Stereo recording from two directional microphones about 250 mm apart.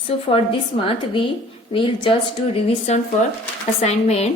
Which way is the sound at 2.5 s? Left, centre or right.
Left.